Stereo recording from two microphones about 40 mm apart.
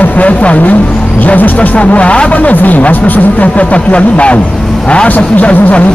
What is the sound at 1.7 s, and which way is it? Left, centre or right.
Speech, left.